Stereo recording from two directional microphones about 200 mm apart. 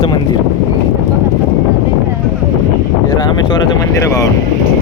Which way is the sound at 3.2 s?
20° left (ahead or behind).